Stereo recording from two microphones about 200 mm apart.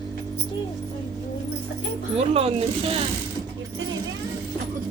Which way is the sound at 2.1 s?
30° right (ahead or behind).